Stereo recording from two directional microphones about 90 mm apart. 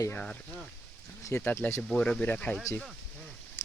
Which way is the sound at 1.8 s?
10° left (ahead or behind).